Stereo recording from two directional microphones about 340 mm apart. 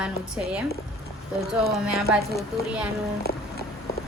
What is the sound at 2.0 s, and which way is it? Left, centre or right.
Speech, centre.